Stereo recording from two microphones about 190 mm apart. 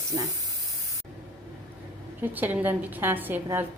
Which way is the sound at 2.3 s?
10° right (ahead or behind).